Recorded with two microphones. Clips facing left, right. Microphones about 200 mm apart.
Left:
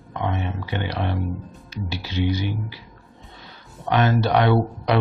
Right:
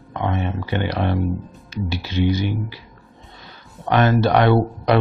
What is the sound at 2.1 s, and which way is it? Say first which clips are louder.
Speech: right 3 dB; 45° right (ahead or behind).